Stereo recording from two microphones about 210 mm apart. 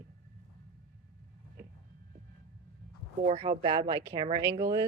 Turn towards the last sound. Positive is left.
turn(degrees=-10)  # may be behind; listen again after turning